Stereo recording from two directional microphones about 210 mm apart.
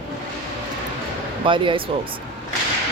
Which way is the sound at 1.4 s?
25° right (ahead or behind).